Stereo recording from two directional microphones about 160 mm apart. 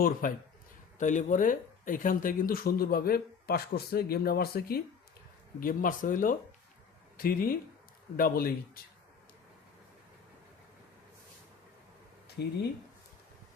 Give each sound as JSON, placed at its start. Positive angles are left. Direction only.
{"t": 0.0, "sound": "speech", "side_deg": 60}
{"t": 5.5, "sound": "speech", "side_deg": 60}
{"t": 12.4, "sound": "speech", "side_deg": 90}